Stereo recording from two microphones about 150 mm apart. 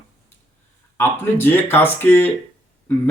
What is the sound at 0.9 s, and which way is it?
Speech, 15° left (ahead or behind).